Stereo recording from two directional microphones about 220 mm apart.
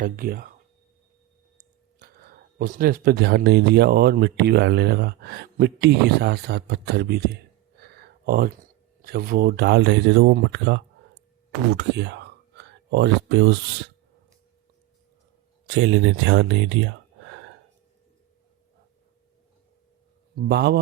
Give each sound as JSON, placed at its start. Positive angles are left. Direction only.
{"t": 0.0, "sound": "speech", "side_deg": -40}
{"t": 2.0, "sound": "speech", "side_deg": -40}
{"t": 15.6, "sound": "speech", "side_deg": -55}
{"t": 20.3, "sound": "speech", "side_deg": -50}